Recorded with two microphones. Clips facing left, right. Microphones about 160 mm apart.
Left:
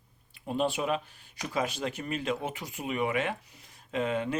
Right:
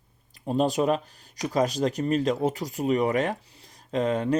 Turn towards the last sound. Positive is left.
turn(degrees=-40)  # may be behind; listen again after turning